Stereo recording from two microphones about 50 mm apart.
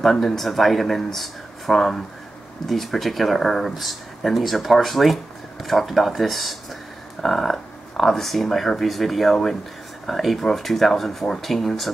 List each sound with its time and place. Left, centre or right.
0.0 s speech: centre